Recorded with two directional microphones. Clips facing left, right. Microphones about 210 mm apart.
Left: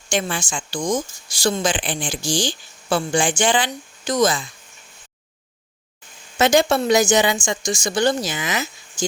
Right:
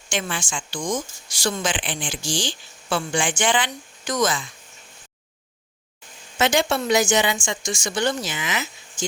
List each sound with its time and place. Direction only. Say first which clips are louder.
0.1 s a woman's voice: left 4 dB; 40° left (ahead or behind)
6.4 s a woman's voice: left 4 dB; 40° left (ahead or behind)